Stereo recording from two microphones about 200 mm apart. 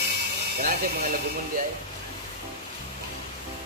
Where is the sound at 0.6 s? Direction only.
50° right (ahead or behind).